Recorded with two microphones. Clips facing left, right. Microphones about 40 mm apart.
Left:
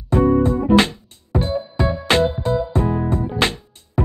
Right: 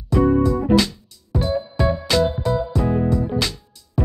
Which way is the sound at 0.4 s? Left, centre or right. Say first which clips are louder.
Left 2 dB; left.